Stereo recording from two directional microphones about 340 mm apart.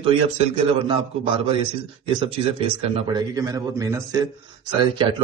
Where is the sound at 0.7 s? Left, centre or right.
Centre.